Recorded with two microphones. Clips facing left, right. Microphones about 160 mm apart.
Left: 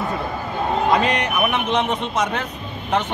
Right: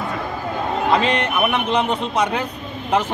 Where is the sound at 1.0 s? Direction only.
Centre (ahead or behind).